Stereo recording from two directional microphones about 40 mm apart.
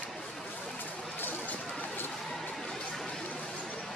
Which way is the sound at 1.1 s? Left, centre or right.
Left.